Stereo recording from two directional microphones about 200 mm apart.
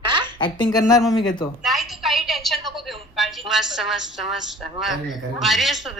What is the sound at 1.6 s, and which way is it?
A woman's voice, centre (ahead or behind).